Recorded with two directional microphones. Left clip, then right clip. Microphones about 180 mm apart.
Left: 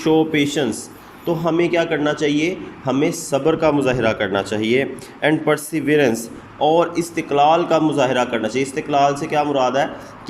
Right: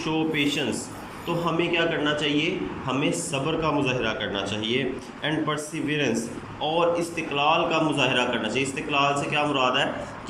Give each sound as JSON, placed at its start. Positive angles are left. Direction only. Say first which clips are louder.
{"t": 0.0, "sound": "a man's voice", "louder": "left 8 dB", "side_deg": 40}